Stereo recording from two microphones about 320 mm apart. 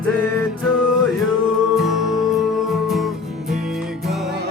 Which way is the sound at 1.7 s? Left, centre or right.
Centre.